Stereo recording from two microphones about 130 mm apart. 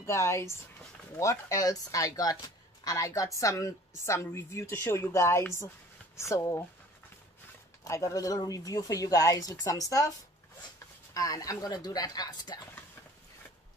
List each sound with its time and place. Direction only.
0.0 s speech: 20° left (ahead or behind)
7.8 s speech: 25° left (ahead or behind)
11.1 s speech: 30° left (ahead or behind)